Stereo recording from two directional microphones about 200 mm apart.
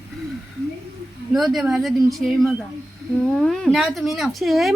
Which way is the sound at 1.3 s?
Centre (ahead or behind).